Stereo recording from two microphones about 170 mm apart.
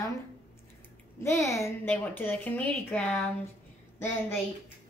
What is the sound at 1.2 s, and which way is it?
A woman's voice, 15° left (ahead or behind).